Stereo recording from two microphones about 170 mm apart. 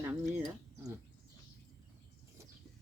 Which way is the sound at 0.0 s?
10° right (ahead or behind).